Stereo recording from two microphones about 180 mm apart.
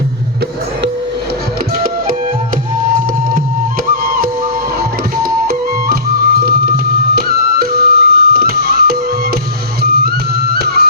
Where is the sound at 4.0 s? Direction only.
55° right (ahead or behind).